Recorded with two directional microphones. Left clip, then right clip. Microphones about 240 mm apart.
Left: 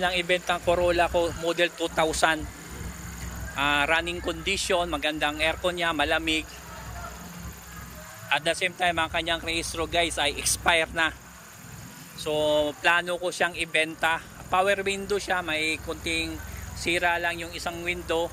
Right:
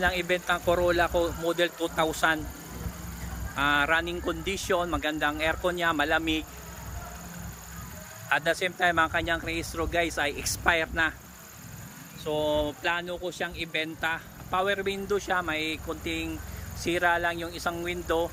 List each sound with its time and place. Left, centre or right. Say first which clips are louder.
0.0 s speech: left 2 dB; centre
3.5 s speech: left 1 dB; centre
8.3 s speech: left 1 dB; centre
12.2 s speech: left 3 dB; centre